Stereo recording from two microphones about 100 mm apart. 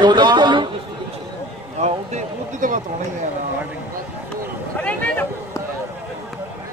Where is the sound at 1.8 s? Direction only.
90° right.